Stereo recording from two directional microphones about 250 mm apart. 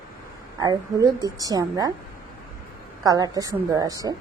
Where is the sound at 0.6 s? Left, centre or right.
Centre.